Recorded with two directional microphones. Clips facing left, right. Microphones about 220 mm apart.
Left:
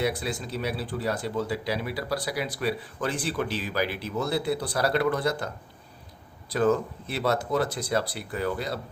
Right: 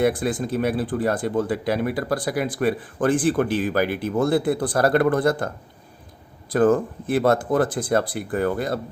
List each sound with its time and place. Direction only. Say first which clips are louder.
0.0 s speech: right 7 dB; 50° right (ahead or behind)
6.5 s speech: right 6 dB; 50° right (ahead or behind)